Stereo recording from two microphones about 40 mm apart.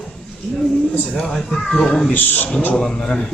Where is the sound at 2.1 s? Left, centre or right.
Left.